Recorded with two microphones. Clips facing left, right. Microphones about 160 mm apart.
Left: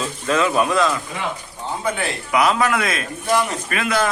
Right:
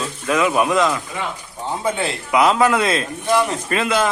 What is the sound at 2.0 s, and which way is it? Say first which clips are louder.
A man's voice: right 2 dB; 25° right (ahead or behind).